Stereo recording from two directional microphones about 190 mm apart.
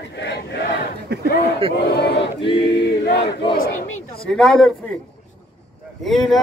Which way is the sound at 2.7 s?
60° left (ahead or behind).